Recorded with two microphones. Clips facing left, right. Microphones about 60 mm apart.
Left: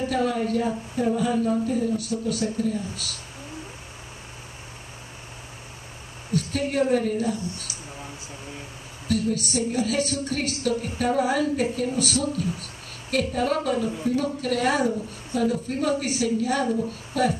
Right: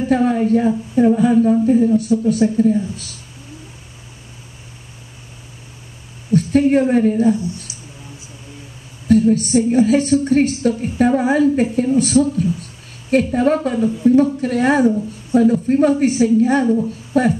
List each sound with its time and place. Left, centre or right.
0.1 s a woman's voice: right
6.3 s a woman's voice: right
9.0 s a woman's voice: right